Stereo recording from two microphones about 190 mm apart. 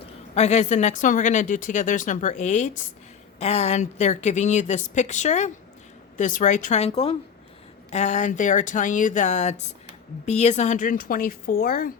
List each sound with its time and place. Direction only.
0.0 s a woman's voice: 35° left (ahead or behind)